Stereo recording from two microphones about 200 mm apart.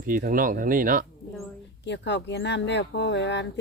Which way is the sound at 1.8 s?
60° left (ahead or behind).